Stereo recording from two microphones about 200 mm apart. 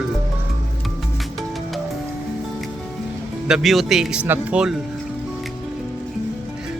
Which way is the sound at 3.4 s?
Centre (ahead or behind).